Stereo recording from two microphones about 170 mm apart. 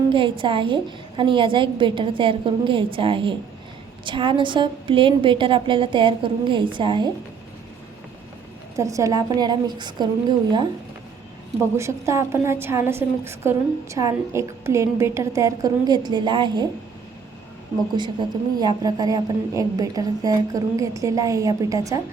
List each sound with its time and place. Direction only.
0.1 s a woman's voice: 30° right (ahead or behind)
8.7 s a woman's voice: 20° right (ahead or behind)
11.8 s a woman's voice: 15° right (ahead or behind)
17.9 s a woman's voice: 25° right (ahead or behind)